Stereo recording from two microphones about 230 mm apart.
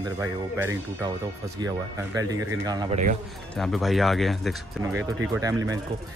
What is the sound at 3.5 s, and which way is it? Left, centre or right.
Speech, centre.